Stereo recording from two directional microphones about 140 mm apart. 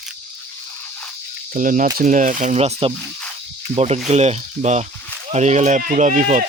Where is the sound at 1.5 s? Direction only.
70° right (ahead or behind).